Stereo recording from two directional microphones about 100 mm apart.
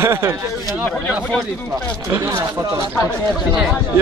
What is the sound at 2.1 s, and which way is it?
Speech, 25° right (ahead or behind).